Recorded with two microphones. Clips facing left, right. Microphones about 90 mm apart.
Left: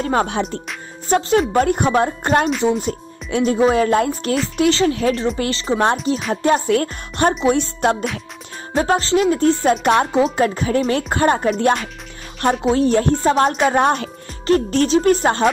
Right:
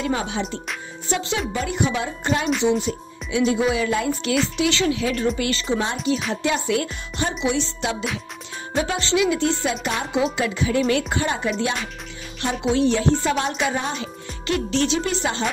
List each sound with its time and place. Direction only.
0.0 s speech: 50° left (ahead or behind)
2.8 s music: 50° left (ahead or behind)
3.5 s speech: 45° left (ahead or behind)
10.1 s speech: 40° left (ahead or behind)
14.4 s speech: 45° left (ahead or behind)